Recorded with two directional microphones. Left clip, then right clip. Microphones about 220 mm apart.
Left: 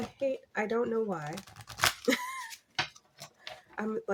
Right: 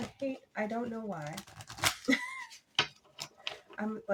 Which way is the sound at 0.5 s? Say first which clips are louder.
Left 4 dB; 55° left (ahead or behind).